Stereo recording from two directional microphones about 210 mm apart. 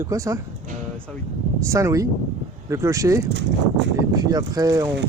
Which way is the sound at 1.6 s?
15° right (ahead or behind).